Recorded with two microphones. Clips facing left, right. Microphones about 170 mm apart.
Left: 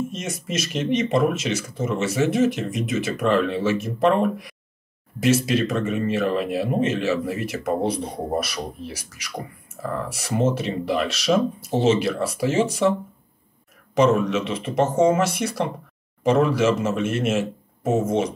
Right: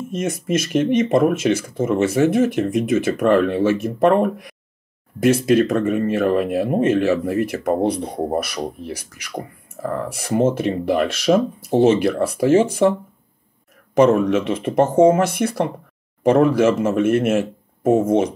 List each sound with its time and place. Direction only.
0.1 s speech: 55° right (ahead or behind)
13.9 s speech: 55° right (ahead or behind)